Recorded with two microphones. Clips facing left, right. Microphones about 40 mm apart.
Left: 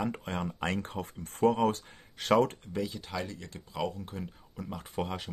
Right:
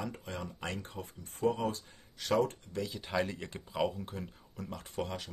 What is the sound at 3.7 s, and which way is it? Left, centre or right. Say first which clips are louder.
Speech: right 1 dB; centre.